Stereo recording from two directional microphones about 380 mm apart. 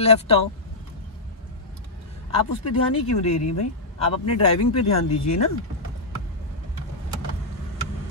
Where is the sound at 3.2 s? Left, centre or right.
Left.